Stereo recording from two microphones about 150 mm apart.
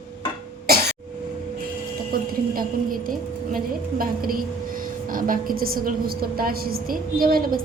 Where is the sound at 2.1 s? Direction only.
80° right.